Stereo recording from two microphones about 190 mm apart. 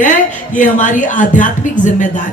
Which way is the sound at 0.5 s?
40° left (ahead or behind).